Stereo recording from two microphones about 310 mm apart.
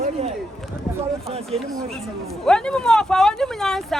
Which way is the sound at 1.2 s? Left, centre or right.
Centre.